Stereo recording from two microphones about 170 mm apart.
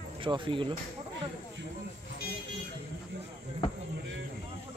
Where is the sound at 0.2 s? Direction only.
30° right (ahead or behind).